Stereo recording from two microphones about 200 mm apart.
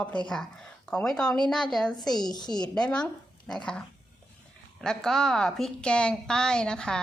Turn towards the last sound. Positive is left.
turn(degrees=5)  # may be behind; listen again after turning